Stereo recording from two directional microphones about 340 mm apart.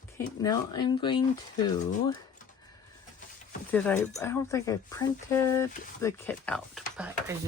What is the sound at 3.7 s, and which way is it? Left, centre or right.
Speech, centre.